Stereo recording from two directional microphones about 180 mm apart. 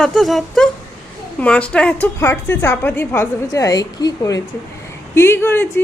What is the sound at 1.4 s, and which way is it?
A woman's voice, 5° left (ahead or behind).